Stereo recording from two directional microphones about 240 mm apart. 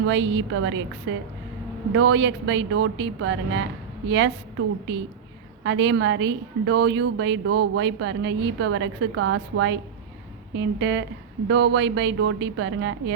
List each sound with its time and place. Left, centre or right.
0.0 s a woman's voice: right
5.6 s a woman's voice: right